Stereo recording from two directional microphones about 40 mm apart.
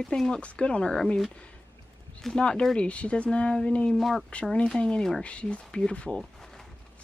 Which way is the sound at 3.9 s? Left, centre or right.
Centre.